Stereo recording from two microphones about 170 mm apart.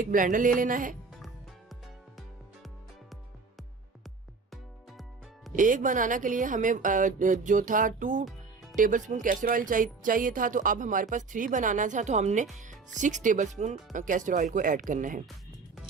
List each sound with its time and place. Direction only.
0.0 s speech: 50° right (ahead or behind)
5.5 s speech: 50° right (ahead or behind)